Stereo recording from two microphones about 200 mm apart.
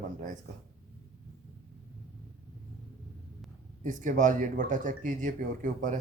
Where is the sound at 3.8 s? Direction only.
40° right (ahead or behind).